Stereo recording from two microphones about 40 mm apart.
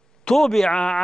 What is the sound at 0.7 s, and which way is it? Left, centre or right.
Speech, left.